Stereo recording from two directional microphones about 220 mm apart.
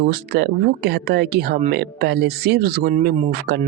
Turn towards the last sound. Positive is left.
turn(degrees=-45)  # may be behind; listen again after turning